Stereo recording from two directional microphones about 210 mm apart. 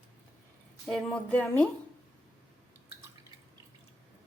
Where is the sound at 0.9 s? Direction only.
5° left (ahead or behind).